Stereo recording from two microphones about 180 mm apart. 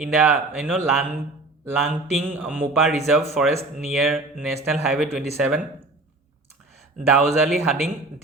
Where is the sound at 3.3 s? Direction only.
Centre (ahead or behind).